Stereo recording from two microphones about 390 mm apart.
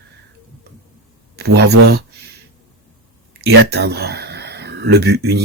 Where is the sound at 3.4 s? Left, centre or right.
Right.